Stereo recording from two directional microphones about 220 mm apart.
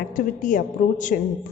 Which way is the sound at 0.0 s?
35° left (ahead or behind).